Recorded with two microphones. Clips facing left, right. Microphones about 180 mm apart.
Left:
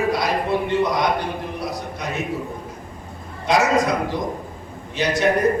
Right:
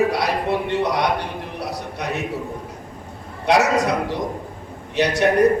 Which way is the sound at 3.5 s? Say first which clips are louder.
Right 1 dB; 70° right (ahead or behind).